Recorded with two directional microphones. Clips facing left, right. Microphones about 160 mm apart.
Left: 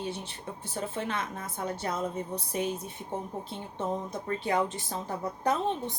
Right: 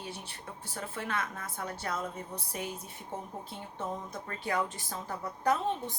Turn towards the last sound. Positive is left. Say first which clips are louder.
# left 1 dB
turn(degrees=20)  # may be behind; listen again after turning